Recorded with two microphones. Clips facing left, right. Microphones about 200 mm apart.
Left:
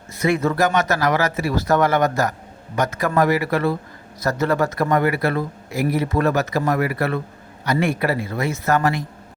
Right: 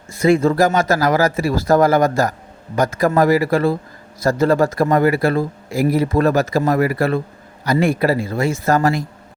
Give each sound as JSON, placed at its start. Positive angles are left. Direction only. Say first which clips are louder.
{"t": 0.2, "sound": "speech", "louder": "right 5 dB", "side_deg": -30}